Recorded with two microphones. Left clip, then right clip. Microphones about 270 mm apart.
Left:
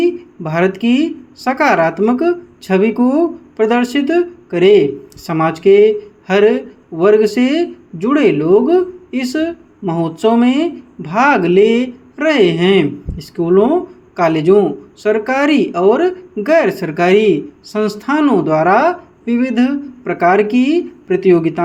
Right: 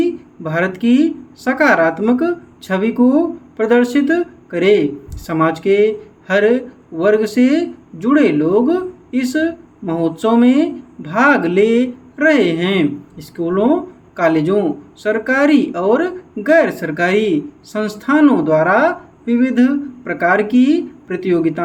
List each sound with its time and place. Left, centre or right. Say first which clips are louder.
0.0 s speech: left 3 dB; left